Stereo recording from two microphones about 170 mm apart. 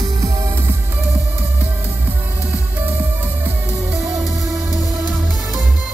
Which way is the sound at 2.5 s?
10° right (ahead or behind).